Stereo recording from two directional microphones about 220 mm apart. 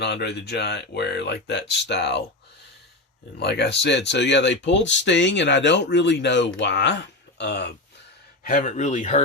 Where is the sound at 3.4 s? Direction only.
50° left (ahead or behind).